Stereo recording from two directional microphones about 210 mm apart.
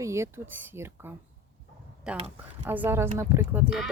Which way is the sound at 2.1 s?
30° right (ahead or behind).